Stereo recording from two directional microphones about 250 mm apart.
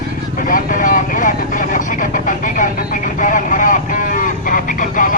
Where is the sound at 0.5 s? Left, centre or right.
Left.